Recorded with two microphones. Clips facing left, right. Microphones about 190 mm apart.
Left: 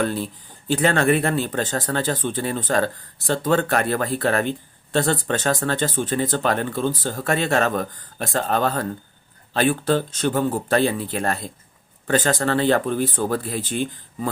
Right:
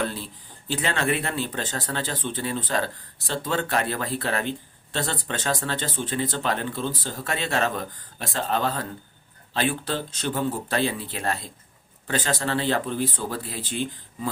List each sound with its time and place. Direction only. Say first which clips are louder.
0.0 s speech: left 6 dB; 50° left (ahead or behind)